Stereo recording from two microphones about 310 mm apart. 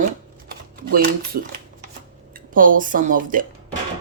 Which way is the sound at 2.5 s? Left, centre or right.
Right.